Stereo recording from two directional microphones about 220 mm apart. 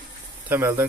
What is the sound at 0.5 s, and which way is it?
Speech, 10° right (ahead or behind).